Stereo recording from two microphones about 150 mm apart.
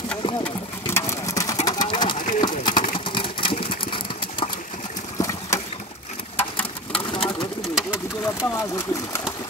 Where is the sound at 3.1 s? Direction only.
35° left (ahead or behind).